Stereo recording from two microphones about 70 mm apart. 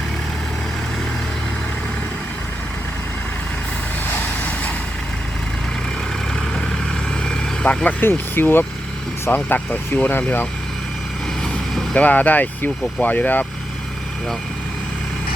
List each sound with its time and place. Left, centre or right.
7.3 s vehicle: centre
8.4 s speech: left
11.9 s speech: left